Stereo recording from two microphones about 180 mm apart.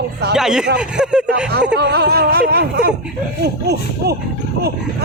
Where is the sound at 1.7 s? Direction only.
70° right (ahead or behind).